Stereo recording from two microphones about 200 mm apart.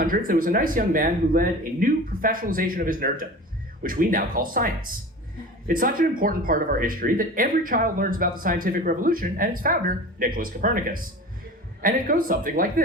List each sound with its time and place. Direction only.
0.3 s speech: 45° right (ahead or behind)